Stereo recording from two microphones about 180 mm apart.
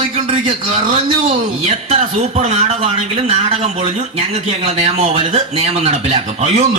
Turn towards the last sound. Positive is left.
turn(degrees=-35)  # may be behind; listen again after turning